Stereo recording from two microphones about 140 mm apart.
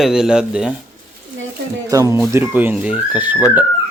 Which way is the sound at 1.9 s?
25° right (ahead or behind).